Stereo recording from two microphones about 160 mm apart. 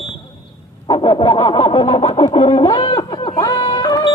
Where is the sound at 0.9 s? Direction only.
30° left (ahead or behind).